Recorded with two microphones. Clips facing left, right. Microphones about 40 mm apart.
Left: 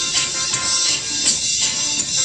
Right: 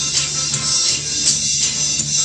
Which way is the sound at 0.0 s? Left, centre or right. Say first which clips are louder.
Left 1 dB; centre.